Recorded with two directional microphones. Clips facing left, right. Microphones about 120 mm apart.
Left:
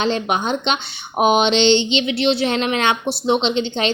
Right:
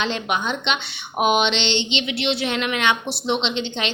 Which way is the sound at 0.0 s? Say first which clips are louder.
Left 4 dB; 40° left (ahead or behind).